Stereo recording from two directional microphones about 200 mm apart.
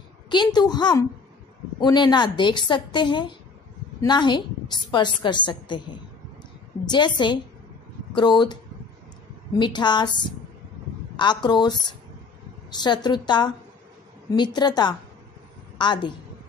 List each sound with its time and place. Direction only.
0.3 s a woman's voice: 20° left (ahead or behind)
9.6 s a woman's voice: 20° left (ahead or behind)
11.1 s a woman's voice: 20° left (ahead or behind)